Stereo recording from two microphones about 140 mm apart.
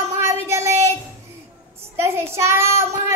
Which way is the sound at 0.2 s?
20° right (ahead or behind).